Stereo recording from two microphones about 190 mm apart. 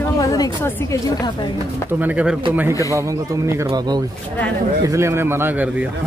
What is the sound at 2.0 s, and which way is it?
Speech, 5° right (ahead or behind).